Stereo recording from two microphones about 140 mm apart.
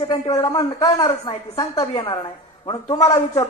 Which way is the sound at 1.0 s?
45° left (ahead or behind).